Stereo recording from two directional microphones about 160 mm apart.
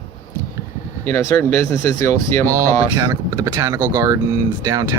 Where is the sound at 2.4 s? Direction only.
20° right (ahead or behind).